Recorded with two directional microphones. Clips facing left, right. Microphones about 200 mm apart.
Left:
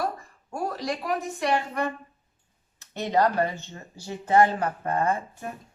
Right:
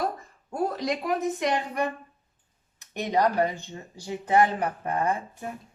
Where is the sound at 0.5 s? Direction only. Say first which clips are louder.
Right 2 dB; 20° right (ahead or behind).